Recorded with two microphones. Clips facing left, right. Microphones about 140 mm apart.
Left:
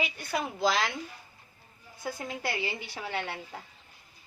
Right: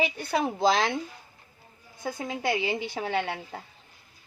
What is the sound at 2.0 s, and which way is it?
A woman's voice, 20° right (ahead or behind).